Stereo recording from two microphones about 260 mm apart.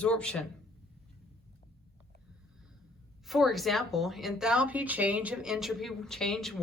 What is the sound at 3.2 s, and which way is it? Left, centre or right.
Speech, centre.